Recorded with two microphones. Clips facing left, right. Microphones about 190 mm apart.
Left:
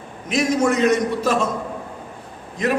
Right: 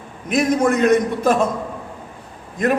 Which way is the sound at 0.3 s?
55° right (ahead or behind).